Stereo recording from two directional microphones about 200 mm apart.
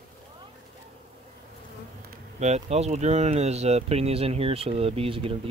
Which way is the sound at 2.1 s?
35° right (ahead or behind).